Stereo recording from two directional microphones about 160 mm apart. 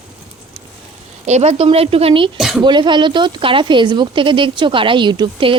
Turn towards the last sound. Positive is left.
turn(degrees=-30)  # may be behind; listen again after turning